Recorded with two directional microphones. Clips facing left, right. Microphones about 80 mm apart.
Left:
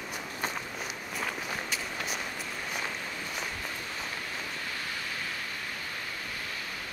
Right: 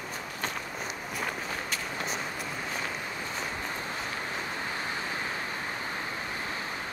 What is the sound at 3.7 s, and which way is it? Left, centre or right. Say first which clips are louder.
Waves: right 3 dB; right.